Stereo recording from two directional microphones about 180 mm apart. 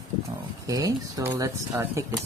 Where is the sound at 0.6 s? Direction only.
20° right (ahead or behind).